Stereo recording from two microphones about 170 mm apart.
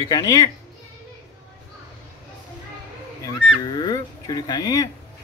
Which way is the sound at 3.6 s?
25° left (ahead or behind).